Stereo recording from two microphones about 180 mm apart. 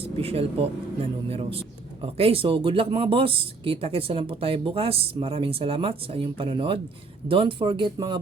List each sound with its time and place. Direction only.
0.2 s speech: 35° right (ahead or behind)